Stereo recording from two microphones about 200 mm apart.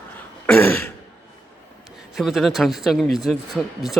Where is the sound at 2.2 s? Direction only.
Centre (ahead or behind).